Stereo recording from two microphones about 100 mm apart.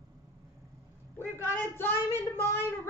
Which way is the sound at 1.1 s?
25° left (ahead or behind).